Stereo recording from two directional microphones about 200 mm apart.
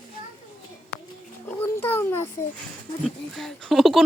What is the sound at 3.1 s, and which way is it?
Speech, centre (ahead or behind).